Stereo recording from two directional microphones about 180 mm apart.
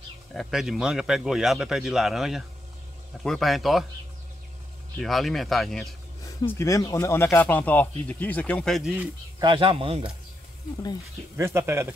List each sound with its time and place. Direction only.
0.3 s a man's voice: centre (ahead or behind)
5.0 s a man's voice: centre (ahead or behind)
6.4 s speech: 15° left (ahead or behind)
9.4 s speech: 30° right (ahead or behind)
11.3 s speech: 15° right (ahead or behind)